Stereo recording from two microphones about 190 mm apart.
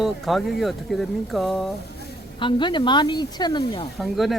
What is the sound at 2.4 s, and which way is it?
Speech, 25° left (ahead or behind).